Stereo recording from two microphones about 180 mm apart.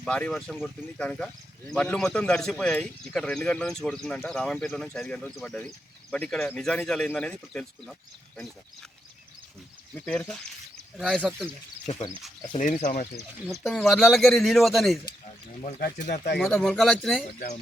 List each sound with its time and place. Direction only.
0.0 s a man's voice: 5° left (ahead or behind)
9.9 s a man's voice: 10° left (ahead or behind)
12.8 s speech: 50° left (ahead or behind)
13.5 s a man's voice: centre (ahead or behind)
15.8 s speech: 45° left (ahead or behind)
16.4 s a man's voice: centre (ahead or behind)